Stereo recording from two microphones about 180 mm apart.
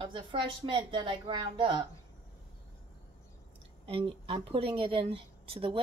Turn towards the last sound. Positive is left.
turn(degrees=-30)  # may be behind; listen again after turning